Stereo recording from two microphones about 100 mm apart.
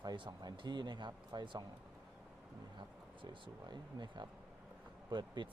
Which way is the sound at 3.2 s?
50° right (ahead or behind).